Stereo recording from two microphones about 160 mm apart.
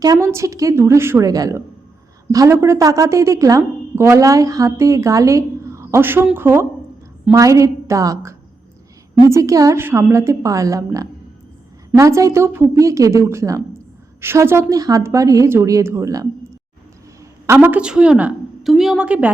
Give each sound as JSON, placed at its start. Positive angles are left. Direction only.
{"t": 0.0, "sound": "a woman's voice", "side_deg": -20}
{"t": 17.4, "sound": "a woman's voice", "side_deg": -15}